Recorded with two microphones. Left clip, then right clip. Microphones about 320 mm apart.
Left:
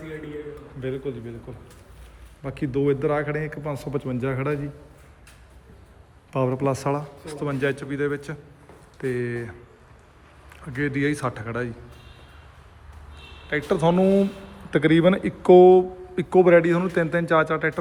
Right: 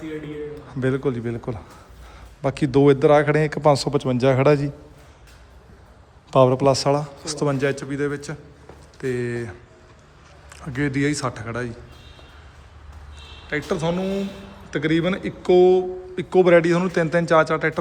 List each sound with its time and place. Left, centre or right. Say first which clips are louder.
0.8 s a man's voice: right 7 dB; right
2.4 s a man's voice: right 7 dB; centre
6.3 s speech: right 8 dB; centre
13.5 s speech: left 2 dB; centre